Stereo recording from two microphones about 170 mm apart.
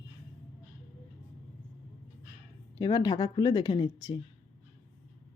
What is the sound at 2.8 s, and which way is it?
Speech, 25° left (ahead or behind).